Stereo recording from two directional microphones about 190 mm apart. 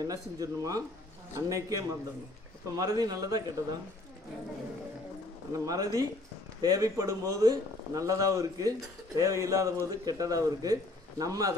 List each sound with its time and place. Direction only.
0.0 s a man's voice: 20° right (ahead or behind)
5.5 s a man's voice: 15° right (ahead or behind)